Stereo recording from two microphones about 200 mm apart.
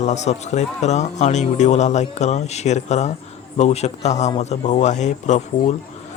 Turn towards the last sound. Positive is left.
turn(degrees=35)  # may be behind; listen again after turning